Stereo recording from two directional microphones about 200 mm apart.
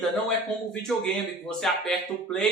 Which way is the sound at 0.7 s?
5° left (ahead or behind).